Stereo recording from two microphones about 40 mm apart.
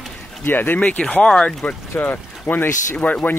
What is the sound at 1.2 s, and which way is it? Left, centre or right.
Speech, left.